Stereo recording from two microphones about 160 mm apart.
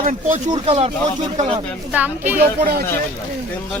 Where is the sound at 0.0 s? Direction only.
50° right (ahead or behind).